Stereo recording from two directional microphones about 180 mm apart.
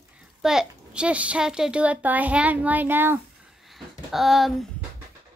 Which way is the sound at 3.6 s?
Centre (ahead or behind).